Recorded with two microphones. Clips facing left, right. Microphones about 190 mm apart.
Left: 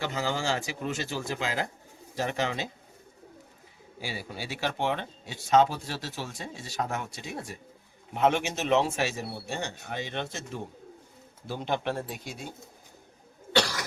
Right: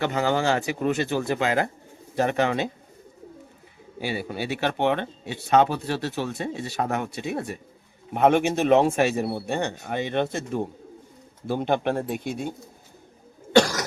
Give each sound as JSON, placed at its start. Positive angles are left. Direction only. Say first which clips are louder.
{"t": 0.0, "sound": "speech", "louder": "right 7 dB", "side_deg": -60}
{"t": 4.0, "sound": "speech", "louder": "right 8 dB", "side_deg": -60}
{"t": 13.5, "sound": "cough", "louder": "right 9 dB", "side_deg": -45}